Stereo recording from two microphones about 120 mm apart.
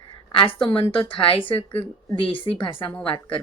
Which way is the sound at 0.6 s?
45° left (ahead or behind).